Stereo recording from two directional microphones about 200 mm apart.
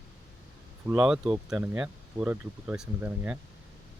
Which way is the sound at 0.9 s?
5° right (ahead or behind).